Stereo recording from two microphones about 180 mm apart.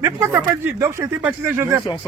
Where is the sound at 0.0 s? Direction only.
15° right (ahead or behind).